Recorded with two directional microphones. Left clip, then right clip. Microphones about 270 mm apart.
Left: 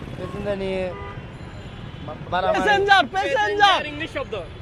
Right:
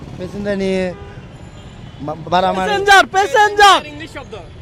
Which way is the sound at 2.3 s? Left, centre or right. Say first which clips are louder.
Right 7 dB; right.